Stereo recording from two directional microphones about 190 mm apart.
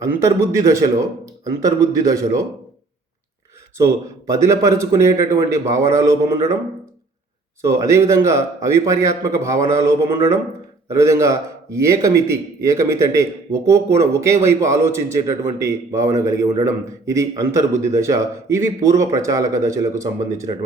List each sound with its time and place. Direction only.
0.0 s speech: 15° right (ahead or behind)
3.8 s speech: 15° right (ahead or behind)
7.6 s speech: 15° right (ahead or behind)